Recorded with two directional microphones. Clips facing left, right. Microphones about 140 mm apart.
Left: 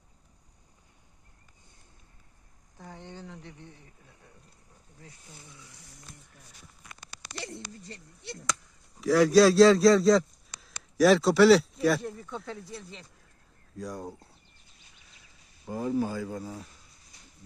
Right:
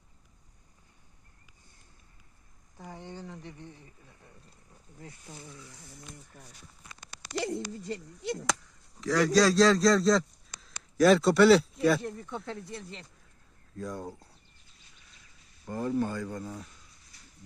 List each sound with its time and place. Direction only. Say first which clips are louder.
2.7 s a sound: right 1 dB; 10° right (ahead or behind)
8.3 s speech: right 5 dB; 90° right
9.0 s a man's voice: left 4 dB; 5° left (ahead or behind)
15.6 s speech: left 1 dB; 10° left (ahead or behind)